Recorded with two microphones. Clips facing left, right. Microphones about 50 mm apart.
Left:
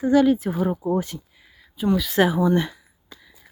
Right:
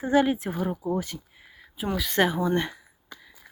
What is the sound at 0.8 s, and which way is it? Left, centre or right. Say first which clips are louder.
Speech: left 4 dB; left.